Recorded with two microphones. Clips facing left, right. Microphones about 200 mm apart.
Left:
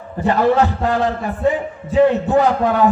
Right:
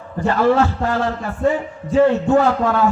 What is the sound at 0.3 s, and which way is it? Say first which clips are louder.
A man's voice: left 1 dB; 15° left (ahead or behind).